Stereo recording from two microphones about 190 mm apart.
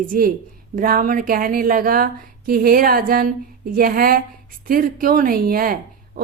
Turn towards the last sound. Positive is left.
turn(degrees=-50)  # may be behind; listen again after turning